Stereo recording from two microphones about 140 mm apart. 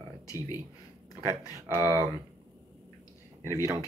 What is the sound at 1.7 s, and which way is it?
Speech, 15° right (ahead or behind).